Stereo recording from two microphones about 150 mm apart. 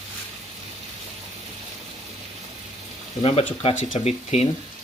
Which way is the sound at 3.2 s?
45° left (ahead or behind).